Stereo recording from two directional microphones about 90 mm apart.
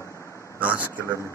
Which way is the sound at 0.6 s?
20° right (ahead or behind).